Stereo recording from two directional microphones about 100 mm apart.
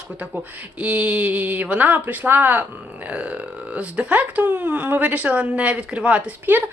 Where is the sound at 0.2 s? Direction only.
15° right (ahead or behind).